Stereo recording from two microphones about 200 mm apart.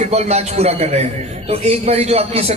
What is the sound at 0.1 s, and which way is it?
Speech, 35° right (ahead or behind).